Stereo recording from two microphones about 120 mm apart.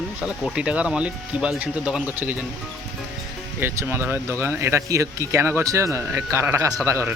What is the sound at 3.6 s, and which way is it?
Speech, 20° right (ahead or behind).